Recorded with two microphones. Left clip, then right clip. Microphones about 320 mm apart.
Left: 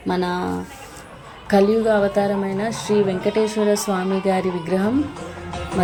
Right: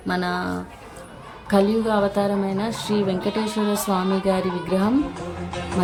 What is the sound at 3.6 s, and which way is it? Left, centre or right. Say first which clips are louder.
Speech: left 5 dB; right.